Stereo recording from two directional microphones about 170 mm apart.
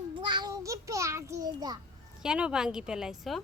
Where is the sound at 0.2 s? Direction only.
25° right (ahead or behind).